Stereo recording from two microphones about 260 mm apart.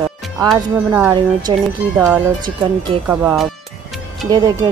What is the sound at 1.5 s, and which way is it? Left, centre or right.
A woman's voice, centre.